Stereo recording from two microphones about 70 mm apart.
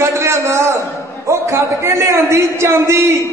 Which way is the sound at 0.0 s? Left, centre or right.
Right.